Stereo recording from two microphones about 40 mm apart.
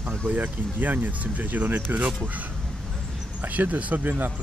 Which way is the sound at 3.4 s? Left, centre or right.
Right.